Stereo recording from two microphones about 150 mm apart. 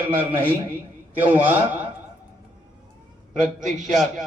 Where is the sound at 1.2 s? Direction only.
10° right (ahead or behind).